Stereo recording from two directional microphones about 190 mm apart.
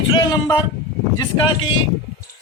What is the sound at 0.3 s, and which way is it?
Speech, 20° left (ahead or behind).